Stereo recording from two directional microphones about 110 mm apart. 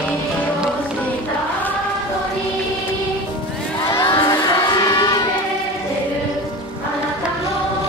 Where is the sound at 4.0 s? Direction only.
50° left (ahead or behind).